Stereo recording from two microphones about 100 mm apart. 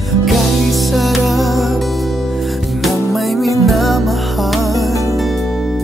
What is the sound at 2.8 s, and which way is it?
Music, centre (ahead or behind).